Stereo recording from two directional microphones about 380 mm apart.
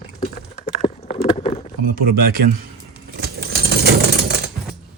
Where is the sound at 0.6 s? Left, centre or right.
Centre.